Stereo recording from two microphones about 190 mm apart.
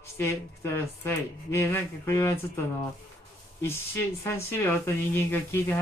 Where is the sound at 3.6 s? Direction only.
10° left (ahead or behind).